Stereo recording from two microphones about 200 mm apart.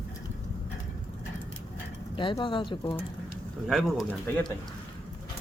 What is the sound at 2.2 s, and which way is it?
Speech, 25° left (ahead or behind).